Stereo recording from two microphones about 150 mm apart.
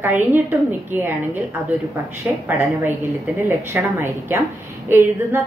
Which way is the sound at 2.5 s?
15° right (ahead or behind).